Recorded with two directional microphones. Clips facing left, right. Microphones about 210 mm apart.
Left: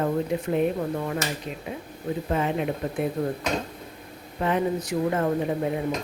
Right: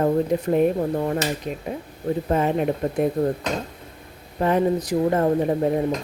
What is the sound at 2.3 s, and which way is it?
Speech, 45° right (ahead or behind).